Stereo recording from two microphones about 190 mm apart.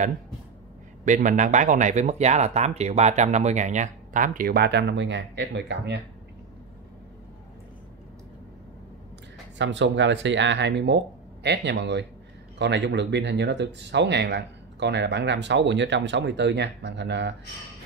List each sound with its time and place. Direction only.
1.0 s speech: 40° right (ahead or behind); by 5.9 s 65° right (ahead or behind)
9.6 s speech: 70° right (ahead or behind)